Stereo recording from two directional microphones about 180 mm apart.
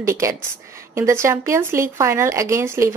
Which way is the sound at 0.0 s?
15° right (ahead or behind).